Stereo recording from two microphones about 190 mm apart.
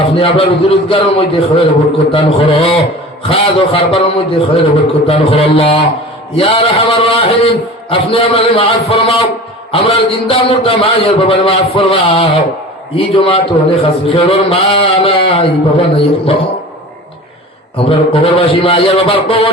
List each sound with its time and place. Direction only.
0.2 s a man's voice: 30° left (ahead or behind)
17.7 s a man's voice: 30° left (ahead or behind)